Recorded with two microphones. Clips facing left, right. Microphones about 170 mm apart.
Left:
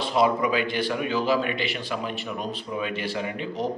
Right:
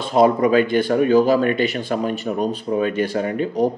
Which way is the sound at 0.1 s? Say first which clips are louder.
Right 8 dB; 45° right (ahead or behind).